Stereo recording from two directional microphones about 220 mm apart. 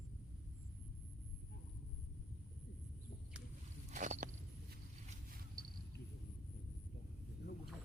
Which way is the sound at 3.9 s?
35° right (ahead or behind).